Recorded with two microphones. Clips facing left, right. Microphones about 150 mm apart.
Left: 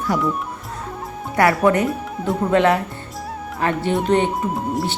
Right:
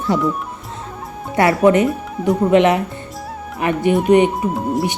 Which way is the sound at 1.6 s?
20° right (ahead or behind).